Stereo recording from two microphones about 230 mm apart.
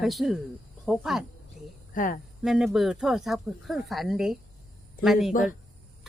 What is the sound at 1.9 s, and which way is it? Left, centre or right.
Speech, left.